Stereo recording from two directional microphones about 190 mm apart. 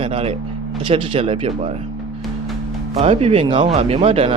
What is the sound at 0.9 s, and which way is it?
Speech, 30° right (ahead or behind).